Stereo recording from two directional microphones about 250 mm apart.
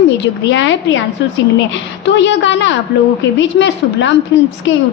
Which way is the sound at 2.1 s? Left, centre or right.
Left.